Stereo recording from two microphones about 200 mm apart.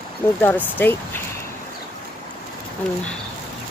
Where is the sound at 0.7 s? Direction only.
10° left (ahead or behind).